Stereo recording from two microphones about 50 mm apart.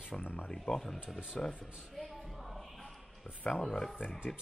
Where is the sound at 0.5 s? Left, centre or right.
Centre.